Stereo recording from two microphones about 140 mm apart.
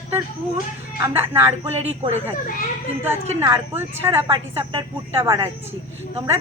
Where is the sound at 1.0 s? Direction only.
15° right (ahead or behind).